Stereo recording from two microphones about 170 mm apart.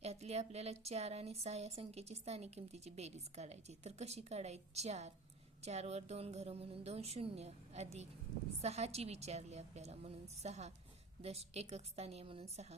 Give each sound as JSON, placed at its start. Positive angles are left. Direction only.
{"t": 0.0, "sound": "speech", "side_deg": -40}